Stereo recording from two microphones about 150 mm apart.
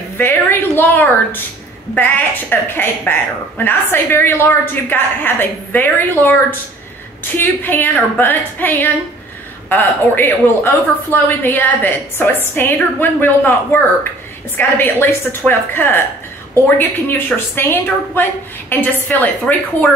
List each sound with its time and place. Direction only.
0.2 s a woman's voice: 15° left (ahead or behind)
7.3 s a woman's voice: 15° left (ahead or behind)